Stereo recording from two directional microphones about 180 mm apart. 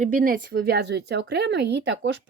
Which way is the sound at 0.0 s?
50° right (ahead or behind).